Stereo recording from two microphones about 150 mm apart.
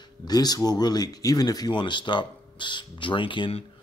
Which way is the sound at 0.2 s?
25° left (ahead or behind).